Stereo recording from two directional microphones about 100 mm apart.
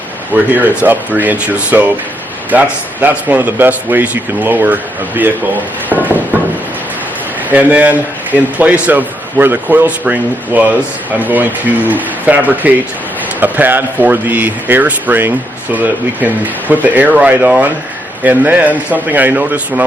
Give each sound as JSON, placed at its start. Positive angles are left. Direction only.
{"t": 0.5, "sound": "a man's voice", "side_deg": -15}
{"t": 5.9, "sound": "a sound", "side_deg": -15}
{"t": 7.5, "sound": "a man's voice", "side_deg": -15}